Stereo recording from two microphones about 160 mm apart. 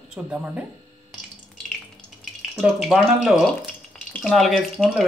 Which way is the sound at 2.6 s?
5° right (ahead or behind).